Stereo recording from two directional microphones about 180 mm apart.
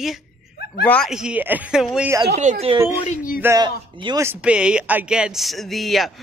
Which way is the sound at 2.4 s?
45° right (ahead or behind).